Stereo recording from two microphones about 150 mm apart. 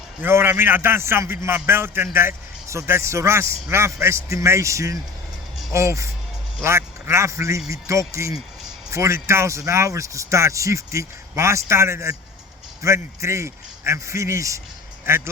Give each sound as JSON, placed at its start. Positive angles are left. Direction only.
{"t": 0.2, "sound": "a man's voice", "side_deg": -15}